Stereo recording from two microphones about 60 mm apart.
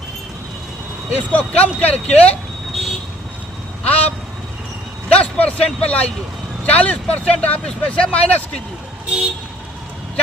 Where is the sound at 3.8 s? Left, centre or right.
Left.